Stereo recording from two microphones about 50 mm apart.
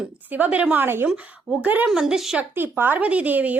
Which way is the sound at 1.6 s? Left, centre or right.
Right.